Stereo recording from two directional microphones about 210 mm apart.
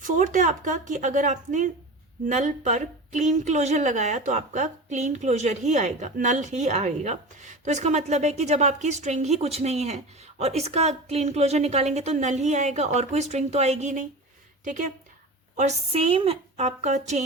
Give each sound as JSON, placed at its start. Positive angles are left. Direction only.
{"t": 0.0, "sound": "a woman's voice", "side_deg": -40}